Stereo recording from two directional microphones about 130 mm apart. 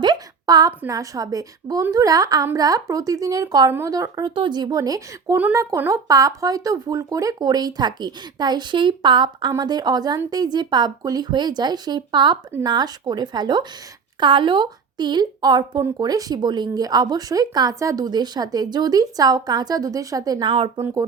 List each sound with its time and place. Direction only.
0.0 s a sound: 30° right (ahead or behind)
0.9 s a woman's voice: 25° right (ahead or behind)
3.7 s speech: 15° right (ahead or behind)
3.9 s a woman's voice: 25° right (ahead or behind)